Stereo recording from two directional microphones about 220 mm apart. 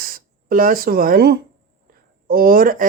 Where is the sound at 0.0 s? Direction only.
40° right (ahead or behind).